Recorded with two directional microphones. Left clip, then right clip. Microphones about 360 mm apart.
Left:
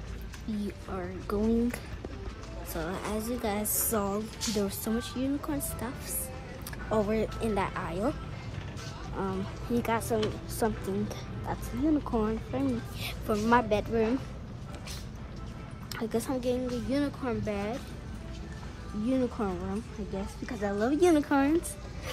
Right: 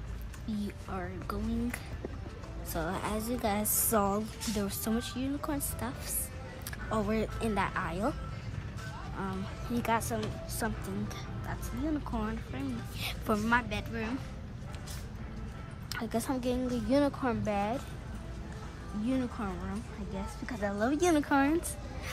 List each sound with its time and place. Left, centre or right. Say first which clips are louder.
0.5 s speech: left 2 dB; centre
9.1 s speech: left 6 dB; centre
15.9 s speech: left 2 dB; centre
19.0 s speech: left 5 dB; centre